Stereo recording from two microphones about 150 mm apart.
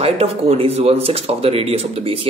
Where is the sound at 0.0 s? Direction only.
40° right (ahead or behind).